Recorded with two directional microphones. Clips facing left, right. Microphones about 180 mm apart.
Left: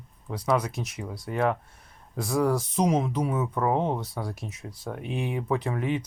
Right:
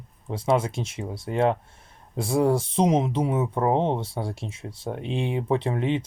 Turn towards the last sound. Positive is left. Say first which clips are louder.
# right 3 dB
turn(degrees=-25)  # may be behind; listen again after turning